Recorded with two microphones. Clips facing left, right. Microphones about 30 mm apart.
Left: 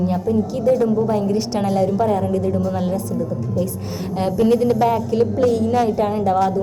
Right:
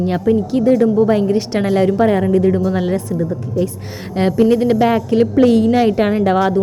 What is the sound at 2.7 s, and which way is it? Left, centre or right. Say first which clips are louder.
Speech: right 4 dB; right.